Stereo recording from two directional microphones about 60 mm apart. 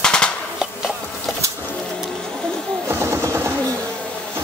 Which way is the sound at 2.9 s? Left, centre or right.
Right.